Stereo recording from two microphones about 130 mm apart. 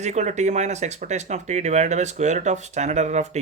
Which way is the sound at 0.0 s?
60° right (ahead or behind).